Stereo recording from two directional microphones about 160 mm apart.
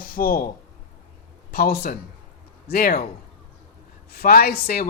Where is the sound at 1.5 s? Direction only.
75° left (ahead or behind).